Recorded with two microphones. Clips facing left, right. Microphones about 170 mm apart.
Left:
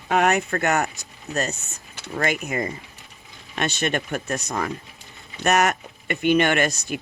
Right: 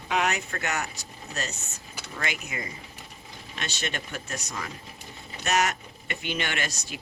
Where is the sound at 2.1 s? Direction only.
50° left (ahead or behind).